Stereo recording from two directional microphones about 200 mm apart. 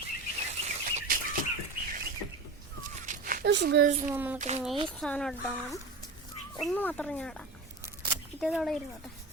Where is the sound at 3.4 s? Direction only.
60° right (ahead or behind).